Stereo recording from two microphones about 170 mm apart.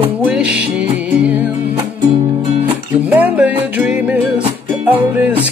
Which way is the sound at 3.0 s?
10° right (ahead or behind).